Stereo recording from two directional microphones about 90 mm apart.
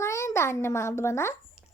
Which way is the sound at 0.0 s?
30° left (ahead or behind).